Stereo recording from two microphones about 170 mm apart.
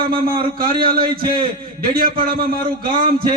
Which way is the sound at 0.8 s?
60° right (ahead or behind).